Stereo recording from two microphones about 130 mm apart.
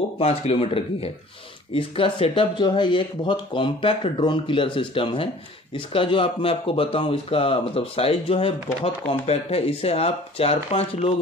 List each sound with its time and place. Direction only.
0.2 s speech: 45° left (ahead or behind)